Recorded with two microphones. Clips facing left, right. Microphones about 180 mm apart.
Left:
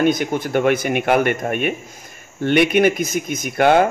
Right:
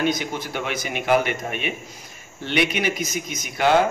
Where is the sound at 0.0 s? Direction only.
50° left (ahead or behind).